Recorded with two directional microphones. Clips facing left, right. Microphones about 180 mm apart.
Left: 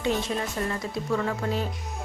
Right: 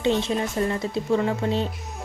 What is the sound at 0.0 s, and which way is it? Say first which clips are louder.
A woman's voice: right 4 dB; 25° right (ahead or behind).